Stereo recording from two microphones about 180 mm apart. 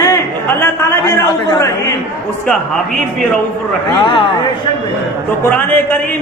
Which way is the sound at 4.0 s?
30° left (ahead or behind).